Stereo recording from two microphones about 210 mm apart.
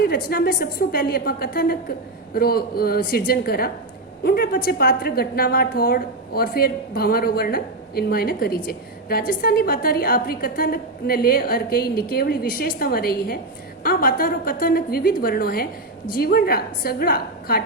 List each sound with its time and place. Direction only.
0.3 s a woman's voice: 45° left (ahead or behind)